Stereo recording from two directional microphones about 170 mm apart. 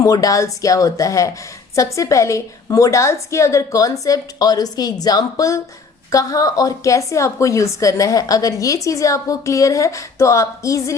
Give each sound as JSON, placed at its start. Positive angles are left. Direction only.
{"t": 0.0, "sound": "a woman's voice", "side_deg": 20}